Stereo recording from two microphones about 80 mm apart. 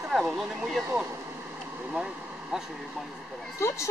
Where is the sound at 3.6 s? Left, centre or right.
Left.